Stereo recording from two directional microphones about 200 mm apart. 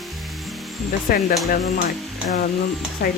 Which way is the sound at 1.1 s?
45° left (ahead or behind).